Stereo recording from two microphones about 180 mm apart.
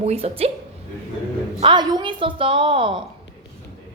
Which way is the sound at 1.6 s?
25° right (ahead or behind).